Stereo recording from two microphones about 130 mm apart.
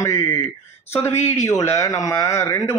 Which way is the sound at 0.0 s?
20° left (ahead or behind).